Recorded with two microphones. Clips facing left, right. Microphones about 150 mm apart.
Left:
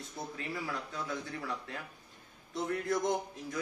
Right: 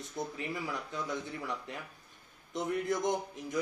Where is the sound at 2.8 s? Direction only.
20° right (ahead or behind).